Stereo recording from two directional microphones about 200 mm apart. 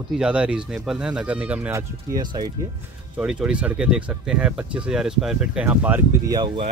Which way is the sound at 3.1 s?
5° right (ahead or behind).